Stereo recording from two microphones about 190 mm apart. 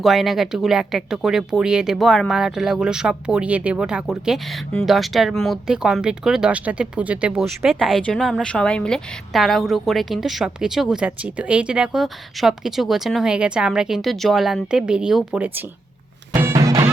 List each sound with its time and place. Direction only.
0.0 s speech: centre (ahead or behind)
16.3 s music: 15° right (ahead or behind)